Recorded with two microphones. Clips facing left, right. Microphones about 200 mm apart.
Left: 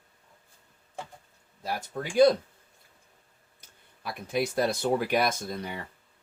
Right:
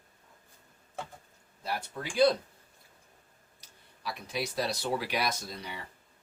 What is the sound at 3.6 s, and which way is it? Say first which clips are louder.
Speech: left 1 dB; 50° left (ahead or behind).